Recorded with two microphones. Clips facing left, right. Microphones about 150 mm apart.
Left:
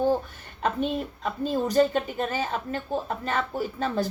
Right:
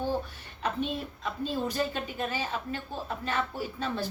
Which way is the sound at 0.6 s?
45° left (ahead or behind).